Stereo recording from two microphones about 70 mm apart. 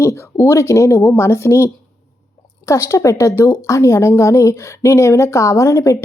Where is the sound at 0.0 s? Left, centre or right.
Left.